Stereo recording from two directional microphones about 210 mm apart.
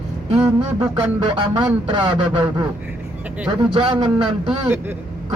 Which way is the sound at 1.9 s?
25° right (ahead or behind).